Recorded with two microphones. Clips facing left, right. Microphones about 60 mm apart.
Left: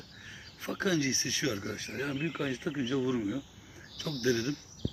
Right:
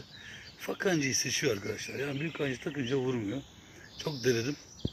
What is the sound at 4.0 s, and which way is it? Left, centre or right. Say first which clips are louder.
Speech: even; right.